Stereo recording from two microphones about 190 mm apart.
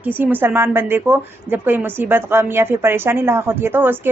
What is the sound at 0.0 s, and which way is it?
A woman's voice, 10° right (ahead or behind).